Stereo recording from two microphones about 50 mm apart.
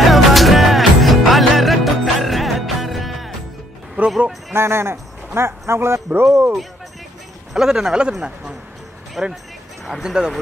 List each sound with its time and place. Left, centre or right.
0.0 s music: centre
4.0 s music: right
4.6 s a man's voice: right
7.5 s a man's voice: centre